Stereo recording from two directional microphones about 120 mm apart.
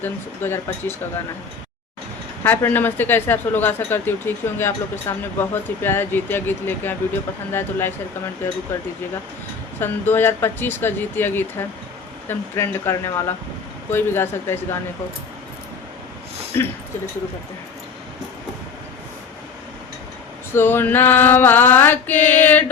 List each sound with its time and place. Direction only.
0.0 s speech: 20° left (ahead or behind)
2.4 s speech: 15° left (ahead or behind)
9.8 s speech: 20° left (ahead or behind)
16.5 s speech: 20° left (ahead or behind)
20.5 s speech: 15° left (ahead or behind)